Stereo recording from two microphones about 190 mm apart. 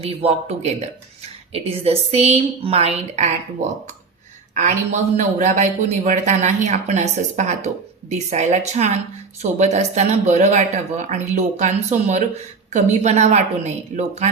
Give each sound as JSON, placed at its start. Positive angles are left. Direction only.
{"t": 0.0, "sound": "speech", "side_deg": -30}